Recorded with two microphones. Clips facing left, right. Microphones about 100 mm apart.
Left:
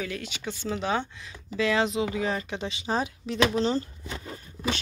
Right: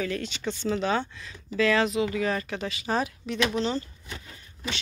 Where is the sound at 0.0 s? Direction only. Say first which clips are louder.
Right 4 dB; 10° left (ahead or behind).